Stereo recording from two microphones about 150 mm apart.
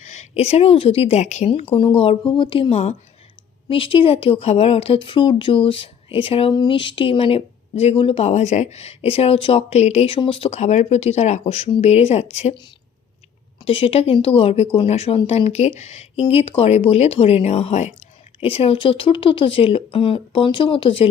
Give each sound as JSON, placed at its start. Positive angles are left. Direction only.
{"t": 0.0, "sound": "a woman's voice", "side_deg": 50}
{"t": 1.7, "sound": "speech", "side_deg": 35}
{"t": 13.6, "sound": "speech", "side_deg": 40}